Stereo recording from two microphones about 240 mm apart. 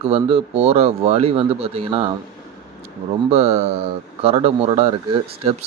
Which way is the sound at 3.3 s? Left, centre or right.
Right.